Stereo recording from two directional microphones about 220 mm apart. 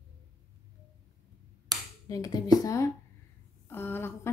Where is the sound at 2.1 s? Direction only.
15° left (ahead or behind).